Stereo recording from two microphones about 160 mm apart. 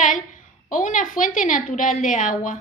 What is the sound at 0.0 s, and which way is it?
A woman's voice, 55° left (ahead or behind).